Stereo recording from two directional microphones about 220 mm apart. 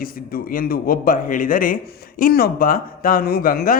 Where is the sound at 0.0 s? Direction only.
40° left (ahead or behind).